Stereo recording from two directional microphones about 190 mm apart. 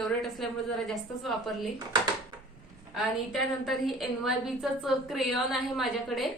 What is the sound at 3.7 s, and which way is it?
A woman's voice, centre (ahead or behind).